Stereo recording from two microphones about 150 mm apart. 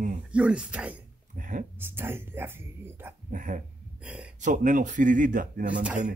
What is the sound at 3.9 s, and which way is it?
Speech, 10° right (ahead or behind).